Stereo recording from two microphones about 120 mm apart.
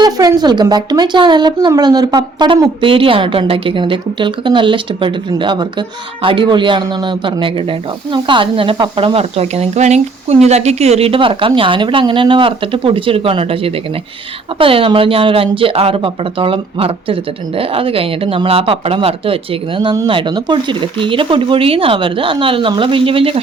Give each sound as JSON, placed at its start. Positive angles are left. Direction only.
{"t": 0.0, "sound": "a man's voice", "side_deg": -30}